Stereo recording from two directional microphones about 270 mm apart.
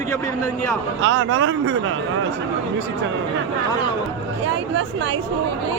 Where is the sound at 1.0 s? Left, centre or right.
Right.